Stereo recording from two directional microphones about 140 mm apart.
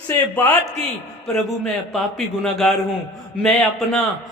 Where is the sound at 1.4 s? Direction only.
Centre (ahead or behind).